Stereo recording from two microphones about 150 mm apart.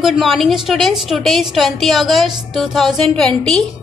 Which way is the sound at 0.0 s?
Centre (ahead or behind).